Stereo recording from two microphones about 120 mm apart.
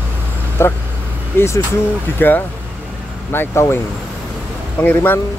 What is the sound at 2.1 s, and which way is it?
Speech, 15° left (ahead or behind).